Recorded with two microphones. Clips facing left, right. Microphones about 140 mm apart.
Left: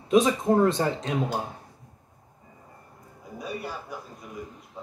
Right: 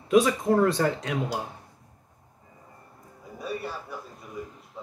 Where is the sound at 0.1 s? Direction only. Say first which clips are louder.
Even; 20° left (ahead or behind).